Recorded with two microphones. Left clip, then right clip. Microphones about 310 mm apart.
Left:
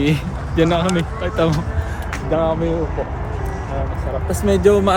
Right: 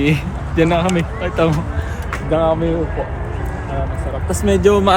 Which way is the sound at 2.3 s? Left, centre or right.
Right.